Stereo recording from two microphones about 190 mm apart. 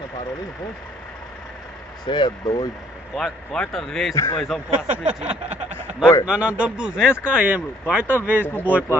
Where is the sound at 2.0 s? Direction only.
25° left (ahead or behind).